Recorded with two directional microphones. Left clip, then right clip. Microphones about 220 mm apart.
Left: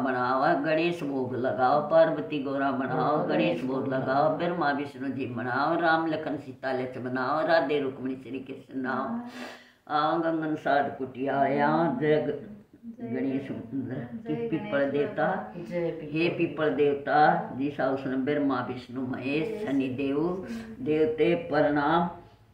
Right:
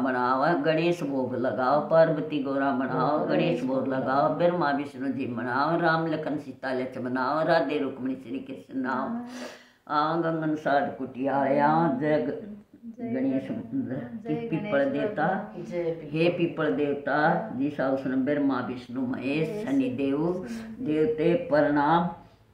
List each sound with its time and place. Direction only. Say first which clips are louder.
0.0 s speech: right 1 dB; 15° right (ahead or behind)
9.8 s speech: even; 15° right (ahead or behind)
13.8 s speech: right 2 dB; 15° right (ahead or behind)